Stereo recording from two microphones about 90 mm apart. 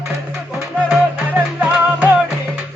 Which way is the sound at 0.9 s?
15° right (ahead or behind).